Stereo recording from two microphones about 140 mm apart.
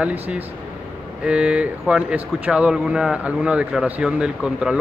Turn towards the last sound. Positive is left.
turn(degrees=-5)  # may be behind; listen again after turning